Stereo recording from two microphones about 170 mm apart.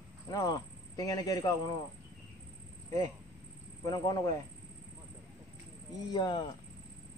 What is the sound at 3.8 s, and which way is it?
Speech, 25° left (ahead or behind).